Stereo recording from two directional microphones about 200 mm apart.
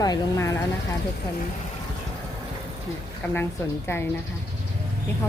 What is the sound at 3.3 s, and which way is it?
Speech, 10° left (ahead or behind).